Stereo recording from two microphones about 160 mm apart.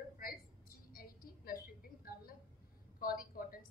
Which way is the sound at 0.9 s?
65° left (ahead or behind).